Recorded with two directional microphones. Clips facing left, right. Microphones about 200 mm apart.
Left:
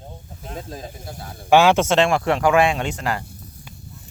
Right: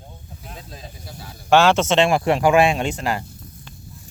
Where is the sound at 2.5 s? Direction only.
25° right (ahead or behind).